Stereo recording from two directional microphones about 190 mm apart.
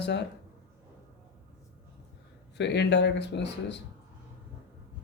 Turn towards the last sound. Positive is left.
turn(degrees=65)  # may be behind; listen again after turning